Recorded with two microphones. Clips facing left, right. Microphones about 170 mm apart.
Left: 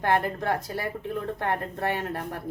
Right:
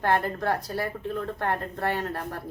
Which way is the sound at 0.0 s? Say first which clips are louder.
Even; 15° left (ahead or behind).